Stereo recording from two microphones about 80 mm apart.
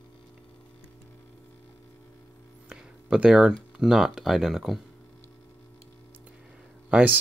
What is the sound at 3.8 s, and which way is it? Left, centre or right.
Speech, centre.